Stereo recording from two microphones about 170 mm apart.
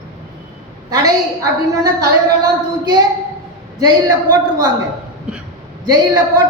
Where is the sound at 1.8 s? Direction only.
20° right (ahead or behind).